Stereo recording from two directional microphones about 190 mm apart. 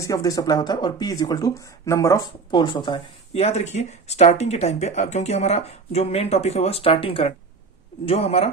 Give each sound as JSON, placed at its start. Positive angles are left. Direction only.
{"t": 0.0, "sound": "speech", "side_deg": 20}